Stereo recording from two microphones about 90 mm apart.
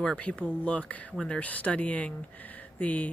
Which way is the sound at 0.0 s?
15° left (ahead or behind).